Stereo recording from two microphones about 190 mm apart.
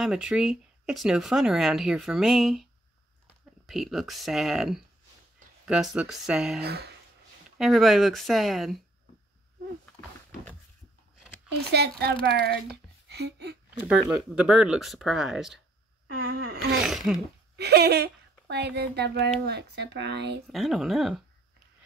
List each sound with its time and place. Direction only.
0.0 s speech: 5° right (ahead or behind)
3.6 s speech: centre (ahead or behind)
6.6 s speech: 60° right (ahead or behind)
7.5 s speech: centre (ahead or behind)
11.6 s speech: 60° right (ahead or behind)
13.8 s speech: centre (ahead or behind)
16.2 s a sound: 50° right (ahead or behind)
16.8 s a sound: centre (ahead or behind)
17.6 s a woman's voice: 60° right (ahead or behind)
20.4 s speech: centre (ahead or behind)